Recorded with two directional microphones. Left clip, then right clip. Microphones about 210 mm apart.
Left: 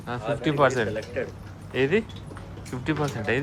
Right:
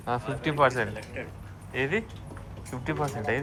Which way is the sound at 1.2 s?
55° left (ahead or behind).